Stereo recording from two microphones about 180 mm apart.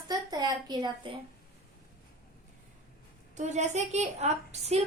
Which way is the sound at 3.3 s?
40° right (ahead or behind).